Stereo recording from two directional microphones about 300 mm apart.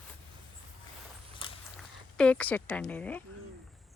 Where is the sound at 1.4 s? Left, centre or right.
Centre.